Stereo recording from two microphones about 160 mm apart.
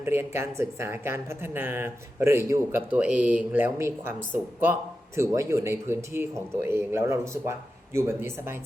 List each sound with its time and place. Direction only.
0.0 s speech: 15° right (ahead or behind)
5.1 s speech: 20° right (ahead or behind)